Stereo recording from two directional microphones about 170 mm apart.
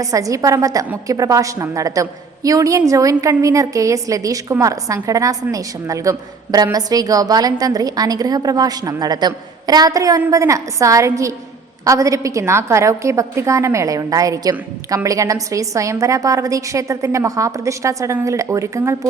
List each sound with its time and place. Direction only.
0.0 s a woman's voice: 20° right (ahead or behind)